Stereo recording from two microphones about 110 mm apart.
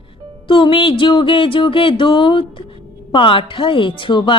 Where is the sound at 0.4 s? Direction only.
50° left (ahead or behind).